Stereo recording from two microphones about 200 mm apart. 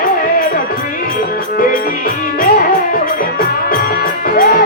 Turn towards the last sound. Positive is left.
turn(degrees=45)  # may be behind; listen again after turning